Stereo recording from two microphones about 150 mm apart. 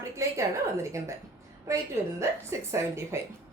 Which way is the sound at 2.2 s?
20° right (ahead or behind).